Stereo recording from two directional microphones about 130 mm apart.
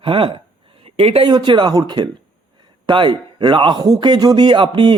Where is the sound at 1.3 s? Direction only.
35° right (ahead or behind).